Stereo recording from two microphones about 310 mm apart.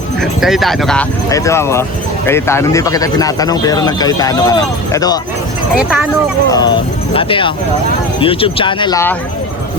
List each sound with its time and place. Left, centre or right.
0.2 s speech: centre
5.7 s speech: centre
6.5 s speech: centre